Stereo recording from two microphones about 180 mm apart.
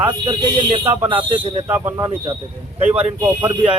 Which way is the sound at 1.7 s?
10° right (ahead or behind).